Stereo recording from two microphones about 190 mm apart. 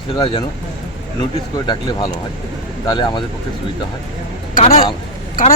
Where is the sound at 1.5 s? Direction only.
20° left (ahead or behind).